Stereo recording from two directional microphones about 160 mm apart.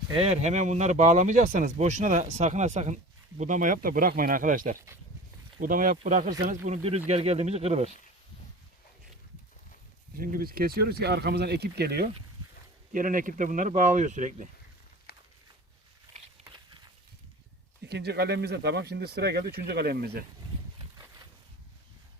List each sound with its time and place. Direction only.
0.1 s speech: 40° right (ahead or behind)
6.5 s speech: 40° right (ahead or behind)
10.2 s speech: 65° right (ahead or behind)
12.9 s speech: 55° right (ahead or behind)
15.1 s walk: 75° left (ahead or behind)
17.8 s speech: 90° right